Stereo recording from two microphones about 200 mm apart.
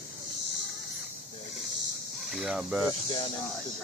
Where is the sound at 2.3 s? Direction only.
5° right (ahead or behind).